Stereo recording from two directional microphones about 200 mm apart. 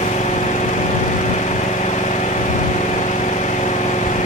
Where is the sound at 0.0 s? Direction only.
35° left (ahead or behind).